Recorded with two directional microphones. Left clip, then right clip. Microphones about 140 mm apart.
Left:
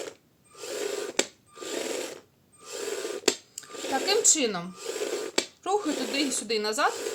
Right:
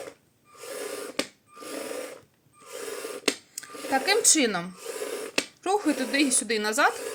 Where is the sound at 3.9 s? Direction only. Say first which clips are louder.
Right 2 dB; 25° right (ahead or behind).